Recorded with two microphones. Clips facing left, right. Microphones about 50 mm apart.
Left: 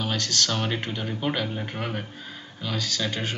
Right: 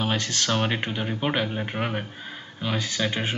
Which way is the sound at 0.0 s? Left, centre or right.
Right.